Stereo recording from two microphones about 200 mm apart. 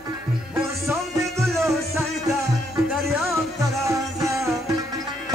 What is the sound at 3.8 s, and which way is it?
Music, 15° right (ahead or behind).